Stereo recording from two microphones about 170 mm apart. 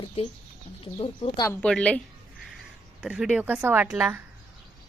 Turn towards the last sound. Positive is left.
turn(degrees=-10)  # may be behind; listen again after turning